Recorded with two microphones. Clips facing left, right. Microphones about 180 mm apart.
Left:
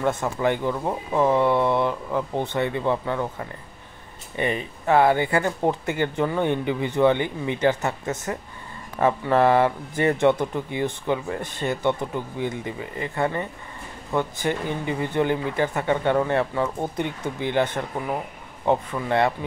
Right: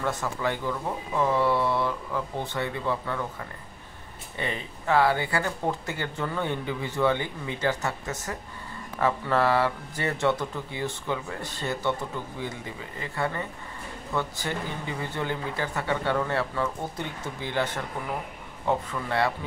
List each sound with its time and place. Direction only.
0.0 s speech: 20° left (ahead or behind)
4.4 s speech: 15° left (ahead or behind)
9.0 s speech: 20° left (ahead or behind)